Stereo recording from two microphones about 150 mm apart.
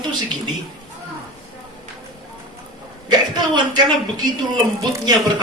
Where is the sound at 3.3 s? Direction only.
30° right (ahead or behind).